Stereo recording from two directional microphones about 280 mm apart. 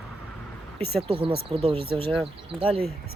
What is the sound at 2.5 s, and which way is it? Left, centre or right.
Speech, centre.